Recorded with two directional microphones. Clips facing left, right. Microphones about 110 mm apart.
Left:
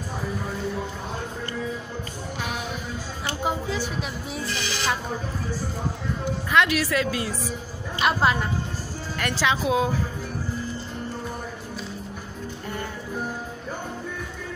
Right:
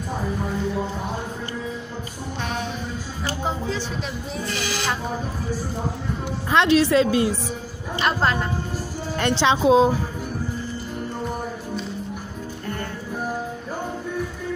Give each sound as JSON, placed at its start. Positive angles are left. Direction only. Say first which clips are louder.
{"t": 6.5, "sound": "a woman's voice", "louder": "right 5 dB", "side_deg": -25}
{"t": 8.0, "sound": "a woman's voice", "louder": "even", "side_deg": 5}
{"t": 9.2, "sound": "a woman's voice", "louder": "right 6 dB", "side_deg": -25}